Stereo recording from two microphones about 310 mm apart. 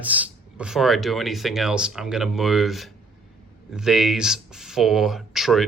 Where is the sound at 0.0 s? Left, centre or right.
Centre.